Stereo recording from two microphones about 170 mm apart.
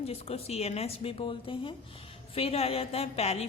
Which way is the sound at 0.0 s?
35° left (ahead or behind).